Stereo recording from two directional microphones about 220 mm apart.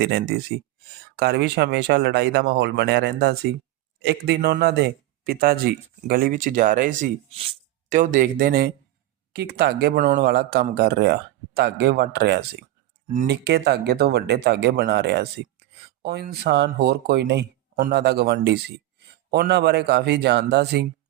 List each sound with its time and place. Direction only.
0.0 s speech: 45° right (ahead or behind)